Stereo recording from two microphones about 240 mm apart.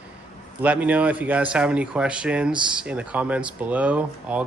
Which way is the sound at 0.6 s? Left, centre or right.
Centre.